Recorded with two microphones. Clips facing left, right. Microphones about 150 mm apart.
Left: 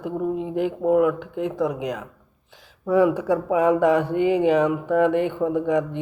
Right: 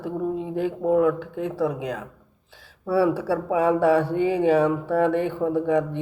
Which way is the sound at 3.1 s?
30° right (ahead or behind).